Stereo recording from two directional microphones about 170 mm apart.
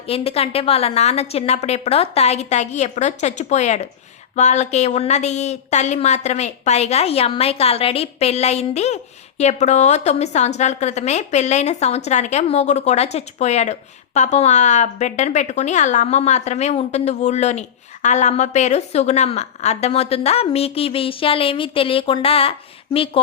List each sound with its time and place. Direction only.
0.1 s a woman's voice: 35° left (ahead or behind)